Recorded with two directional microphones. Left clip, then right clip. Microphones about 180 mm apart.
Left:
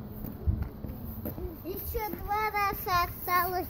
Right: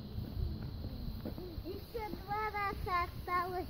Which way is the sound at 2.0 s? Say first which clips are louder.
Left 8 dB; 10° left (ahead or behind).